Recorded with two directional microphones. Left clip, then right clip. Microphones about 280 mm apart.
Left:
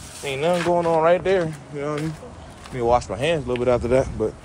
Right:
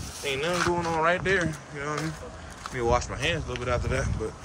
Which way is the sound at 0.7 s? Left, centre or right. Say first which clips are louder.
Left 7 dB; centre.